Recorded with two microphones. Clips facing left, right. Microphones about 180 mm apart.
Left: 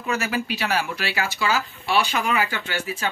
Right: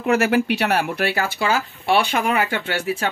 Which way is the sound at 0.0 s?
60° right (ahead or behind).